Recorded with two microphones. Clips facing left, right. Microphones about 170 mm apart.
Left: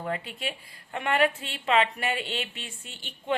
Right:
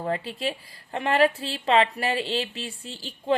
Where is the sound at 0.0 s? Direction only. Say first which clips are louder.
Right 5 dB; 30° right (ahead or behind).